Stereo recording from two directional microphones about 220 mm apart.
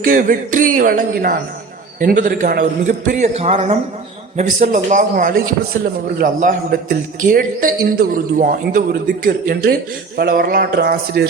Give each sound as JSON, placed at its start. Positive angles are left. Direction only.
{"t": 0.0, "sound": "a man's voice", "side_deg": -40}